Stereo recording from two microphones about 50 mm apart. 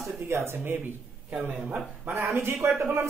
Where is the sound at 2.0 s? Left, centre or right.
Right.